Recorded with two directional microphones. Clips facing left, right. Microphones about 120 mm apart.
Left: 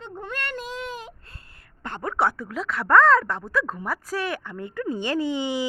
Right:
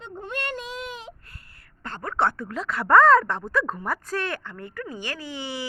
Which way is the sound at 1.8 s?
15° left (ahead or behind).